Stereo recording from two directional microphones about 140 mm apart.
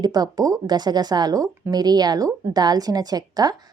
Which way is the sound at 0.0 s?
30° right (ahead or behind).